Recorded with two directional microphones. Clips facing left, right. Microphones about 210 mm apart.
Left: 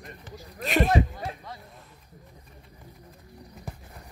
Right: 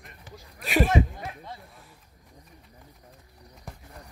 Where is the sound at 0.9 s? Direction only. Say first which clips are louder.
Even; 30° left (ahead or behind).